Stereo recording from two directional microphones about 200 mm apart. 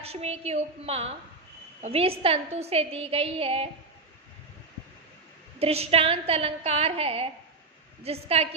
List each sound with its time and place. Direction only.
0.0 s a woman's voice: 30° right (ahead or behind)
5.5 s a woman's voice: 30° right (ahead or behind)